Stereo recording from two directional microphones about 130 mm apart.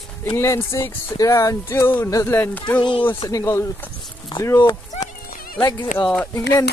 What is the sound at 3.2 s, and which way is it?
Speech, 25° left (ahead or behind).